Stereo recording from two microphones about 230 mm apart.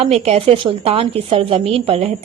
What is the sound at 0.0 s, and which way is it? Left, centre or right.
A woman's voice, right.